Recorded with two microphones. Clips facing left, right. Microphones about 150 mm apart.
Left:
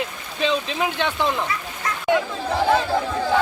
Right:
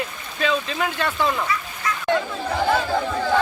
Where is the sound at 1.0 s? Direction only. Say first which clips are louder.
Right 1 dB; centre (ahead or behind).